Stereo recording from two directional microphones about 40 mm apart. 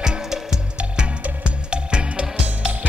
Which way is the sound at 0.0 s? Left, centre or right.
Centre.